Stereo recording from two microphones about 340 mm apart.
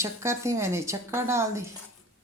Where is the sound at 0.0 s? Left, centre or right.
Centre.